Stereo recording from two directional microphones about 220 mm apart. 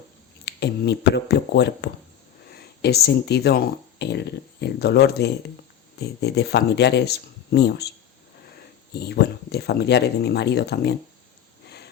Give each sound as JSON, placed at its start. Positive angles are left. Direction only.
{"t": 0.4, "sound": "speech", "side_deg": 50}
{"t": 8.9, "sound": "speech", "side_deg": 45}